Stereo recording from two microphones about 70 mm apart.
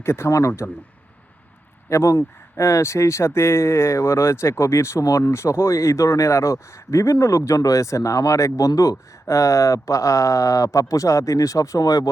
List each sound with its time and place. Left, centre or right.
0.0 s speech: left
1.9 s speech: left